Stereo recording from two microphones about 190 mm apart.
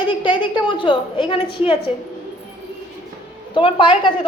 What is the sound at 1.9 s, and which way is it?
Speech, 10° right (ahead or behind).